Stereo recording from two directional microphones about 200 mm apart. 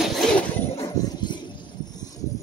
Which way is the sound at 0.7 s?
20° left (ahead or behind).